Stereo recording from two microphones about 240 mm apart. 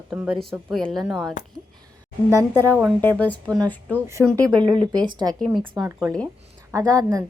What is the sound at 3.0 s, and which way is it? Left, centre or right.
A woman's voice, centre.